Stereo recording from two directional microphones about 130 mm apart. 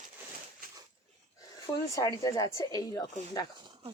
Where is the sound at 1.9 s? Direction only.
25° left (ahead or behind).